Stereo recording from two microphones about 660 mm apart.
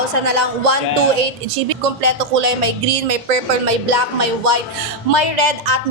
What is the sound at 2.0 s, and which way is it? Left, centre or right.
Music, right.